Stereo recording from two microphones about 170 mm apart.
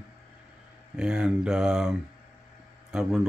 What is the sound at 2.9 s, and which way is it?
Mantra, 5° right (ahead or behind).